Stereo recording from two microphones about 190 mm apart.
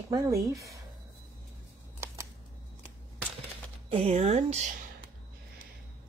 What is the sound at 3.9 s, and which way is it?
Speech, 30° right (ahead or behind).